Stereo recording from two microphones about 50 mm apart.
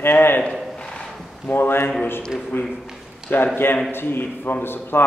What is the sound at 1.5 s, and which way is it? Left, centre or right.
Speech, left.